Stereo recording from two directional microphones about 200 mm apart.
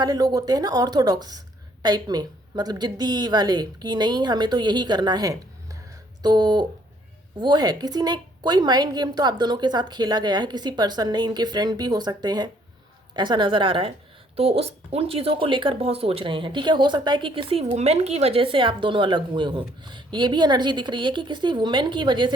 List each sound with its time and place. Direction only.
0.0 s a woman's voice: 20° right (ahead or behind)